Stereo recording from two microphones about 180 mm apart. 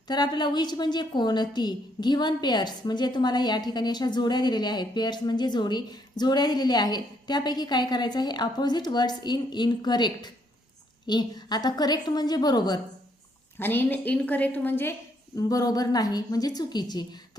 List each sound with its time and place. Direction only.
0.1 s a woman's voice: 25° left (ahead or behind)
13.6 s a woman's voice: 10° left (ahead or behind)